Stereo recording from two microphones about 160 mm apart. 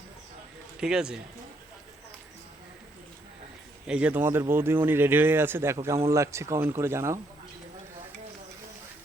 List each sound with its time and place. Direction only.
0.8 s speech: 5° right (ahead or behind)
3.8 s speech: 5° right (ahead or behind)